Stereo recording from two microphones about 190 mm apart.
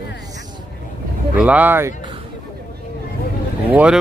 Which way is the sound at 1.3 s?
10° right (ahead or behind).